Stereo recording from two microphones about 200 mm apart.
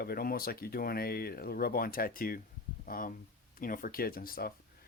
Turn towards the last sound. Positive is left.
turn(degrees=45)  # may be behind; listen again after turning